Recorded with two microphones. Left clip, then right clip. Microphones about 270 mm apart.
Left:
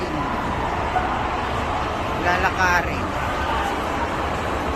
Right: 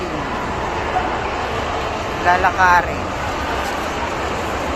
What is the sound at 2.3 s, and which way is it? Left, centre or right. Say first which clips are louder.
Speech: right 7 dB; centre.